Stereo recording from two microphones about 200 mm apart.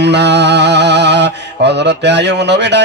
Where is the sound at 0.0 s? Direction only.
55° right (ahead or behind).